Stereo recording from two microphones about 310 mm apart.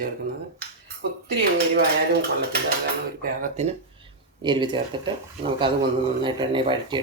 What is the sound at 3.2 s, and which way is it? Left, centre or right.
Speech, right.